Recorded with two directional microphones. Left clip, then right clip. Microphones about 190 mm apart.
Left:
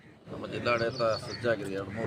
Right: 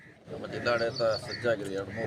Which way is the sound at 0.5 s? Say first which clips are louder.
Even; 10° left (ahead or behind).